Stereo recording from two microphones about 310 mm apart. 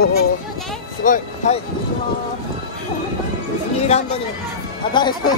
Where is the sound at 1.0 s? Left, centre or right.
Left.